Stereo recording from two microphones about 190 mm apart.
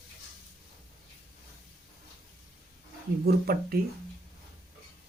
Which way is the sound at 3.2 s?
55° right (ahead or behind).